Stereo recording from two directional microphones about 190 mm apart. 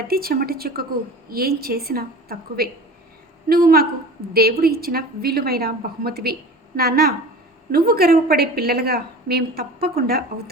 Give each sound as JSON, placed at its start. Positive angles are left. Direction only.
{"t": 0.1, "sound": "a woman's voice", "side_deg": -50}